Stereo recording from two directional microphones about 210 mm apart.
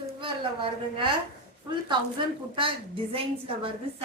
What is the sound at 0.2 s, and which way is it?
Speech, 25° right (ahead or behind).